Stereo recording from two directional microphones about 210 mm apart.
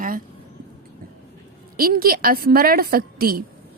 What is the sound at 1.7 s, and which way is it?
Speech, 45° right (ahead or behind).